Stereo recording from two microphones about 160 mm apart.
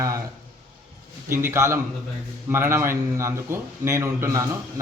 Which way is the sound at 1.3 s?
15° right (ahead or behind).